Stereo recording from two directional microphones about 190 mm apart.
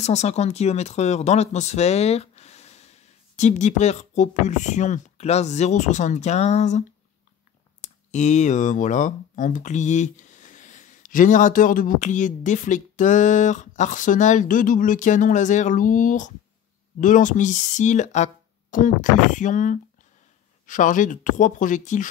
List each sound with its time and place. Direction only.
0.0 s speech: 35° left (ahead or behind)
7.8 s speech: 40° left (ahead or behind)